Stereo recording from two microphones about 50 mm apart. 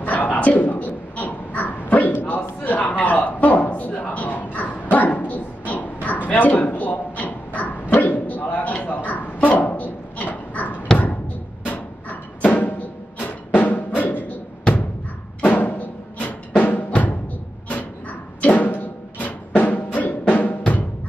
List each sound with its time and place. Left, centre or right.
0.0 s crow: left
7.9 s a sound: left
11.6 s music: left
13.6 s drum: left
14.6 s a sound: left
15.4 s music: left
18.4 s music: left